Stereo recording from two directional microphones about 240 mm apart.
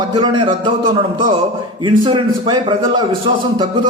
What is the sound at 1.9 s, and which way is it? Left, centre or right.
A man's voice, centre.